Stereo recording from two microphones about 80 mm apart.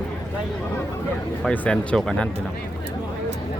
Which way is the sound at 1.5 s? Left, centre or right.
Centre.